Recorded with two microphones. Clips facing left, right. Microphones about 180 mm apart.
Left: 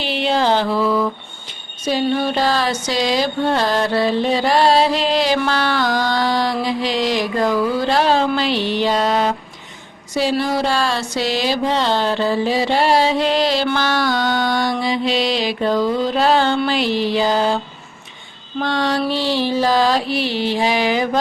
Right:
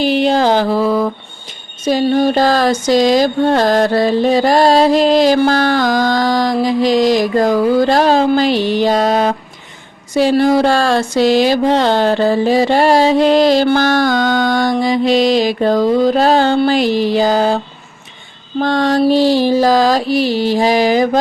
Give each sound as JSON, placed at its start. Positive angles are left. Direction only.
{"t": 0.0, "sound": "a sound", "side_deg": -40}
{"t": 1.8, "sound": "speech", "side_deg": -45}
{"t": 18.6, "sound": "music", "side_deg": -45}